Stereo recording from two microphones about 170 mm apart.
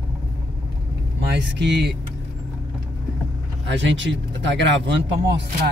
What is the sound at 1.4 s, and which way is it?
Speech, 90° right.